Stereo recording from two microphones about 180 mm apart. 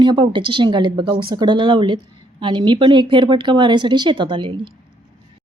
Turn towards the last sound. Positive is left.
turn(degrees=-25)  # may be behind; listen again after turning